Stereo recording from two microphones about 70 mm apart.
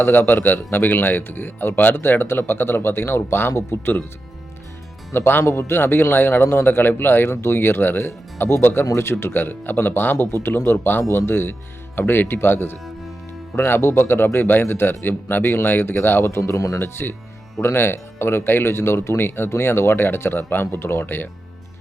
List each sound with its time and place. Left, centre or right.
0.0 s speech: left
5.1 s speech: left
16.4 s speech: left
16.8 s speech: left